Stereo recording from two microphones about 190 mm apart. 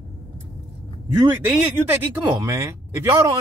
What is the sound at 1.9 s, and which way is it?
A man's voice, 15° right (ahead or behind).